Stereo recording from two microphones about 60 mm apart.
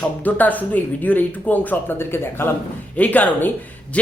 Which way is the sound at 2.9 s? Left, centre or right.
Left.